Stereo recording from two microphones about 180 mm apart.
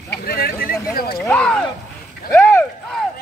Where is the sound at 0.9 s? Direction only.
55° left (ahead or behind).